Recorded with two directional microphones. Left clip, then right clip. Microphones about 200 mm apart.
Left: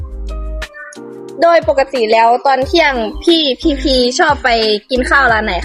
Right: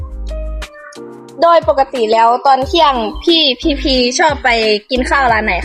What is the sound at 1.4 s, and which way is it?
A woman's voice, 20° left (ahead or behind).